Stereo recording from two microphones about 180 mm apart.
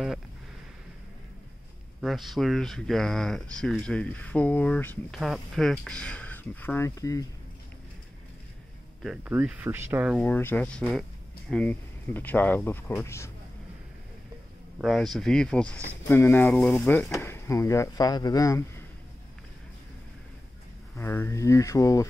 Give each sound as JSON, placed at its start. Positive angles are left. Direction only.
{"t": 2.0, "sound": "speech", "side_deg": 0}
{"t": 9.0, "sound": "speech", "side_deg": -5}
{"t": 10.1, "sound": "speech", "side_deg": 10}
{"t": 14.8, "sound": "speech", "side_deg": 0}
{"t": 20.9, "sound": "speech", "side_deg": 15}